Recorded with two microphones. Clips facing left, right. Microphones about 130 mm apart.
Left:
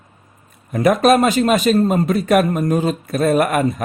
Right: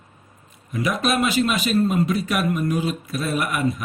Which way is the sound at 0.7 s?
50° left (ahead or behind).